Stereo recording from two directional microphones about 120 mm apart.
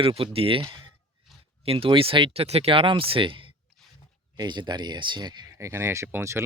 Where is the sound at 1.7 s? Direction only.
50° right (ahead or behind).